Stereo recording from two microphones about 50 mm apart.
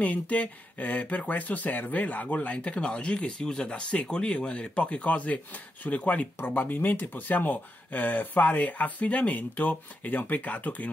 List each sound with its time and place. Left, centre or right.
0.0 s speech: left